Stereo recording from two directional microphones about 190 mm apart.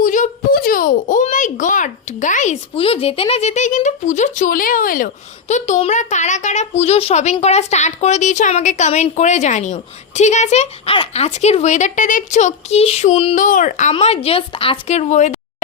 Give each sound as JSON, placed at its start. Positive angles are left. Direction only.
{"t": 0.0, "sound": "a child's voice", "side_deg": 45}